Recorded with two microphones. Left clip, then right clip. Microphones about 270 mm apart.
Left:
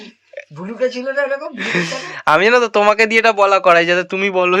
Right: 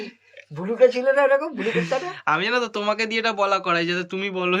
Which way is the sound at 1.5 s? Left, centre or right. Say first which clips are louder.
Left 4 dB; centre.